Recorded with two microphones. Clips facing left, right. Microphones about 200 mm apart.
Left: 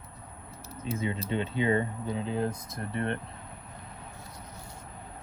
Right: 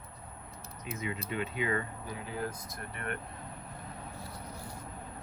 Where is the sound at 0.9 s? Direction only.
30° left (ahead or behind).